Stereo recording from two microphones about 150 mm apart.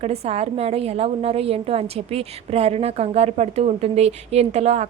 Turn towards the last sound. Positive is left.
turn(degrees=-45)  # may be behind; listen again after turning